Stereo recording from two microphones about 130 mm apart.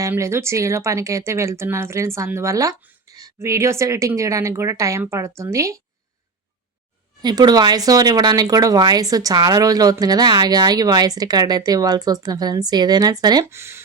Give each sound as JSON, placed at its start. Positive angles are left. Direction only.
{"t": 0.0, "sound": "speech", "side_deg": -20}
{"t": 7.2, "sound": "speech", "side_deg": -30}
{"t": 13.4, "sound": "speech", "side_deg": -20}